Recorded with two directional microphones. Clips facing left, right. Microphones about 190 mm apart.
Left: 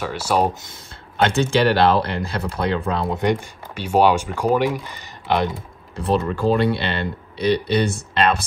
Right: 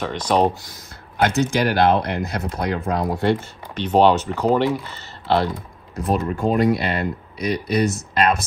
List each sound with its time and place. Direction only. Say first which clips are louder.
0.0 s speech: right 1 dB; 5° left (ahead or behind)
1.2 s speech: left 1 dB; 30° left (ahead or behind)
3.2 s speech: right 1 dB; 15° left (ahead or behind)
5.9 s speech: left 1 dB; 30° left (ahead or behind)